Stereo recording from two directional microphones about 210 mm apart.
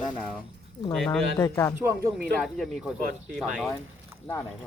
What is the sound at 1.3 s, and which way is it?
Speech, 15° left (ahead or behind).